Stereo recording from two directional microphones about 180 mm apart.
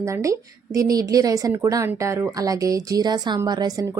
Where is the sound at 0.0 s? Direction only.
15° right (ahead or behind).